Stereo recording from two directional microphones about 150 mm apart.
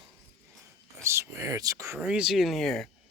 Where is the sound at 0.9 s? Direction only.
20° right (ahead or behind).